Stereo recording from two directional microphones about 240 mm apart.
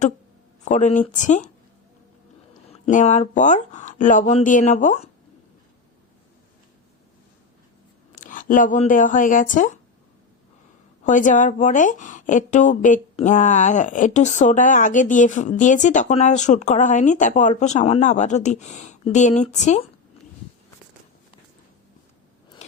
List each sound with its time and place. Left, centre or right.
0.6 s a woman's voice: left
2.5 s a woman's voice: left
8.2 s a woman's voice: left
11.0 s a woman's voice: left